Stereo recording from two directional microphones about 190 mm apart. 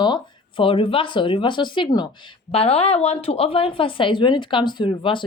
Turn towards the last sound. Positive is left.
turn(degrees=25)  # may be behind; listen again after turning